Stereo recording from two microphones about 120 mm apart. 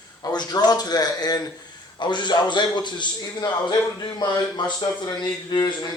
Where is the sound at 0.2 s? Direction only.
35° left (ahead or behind).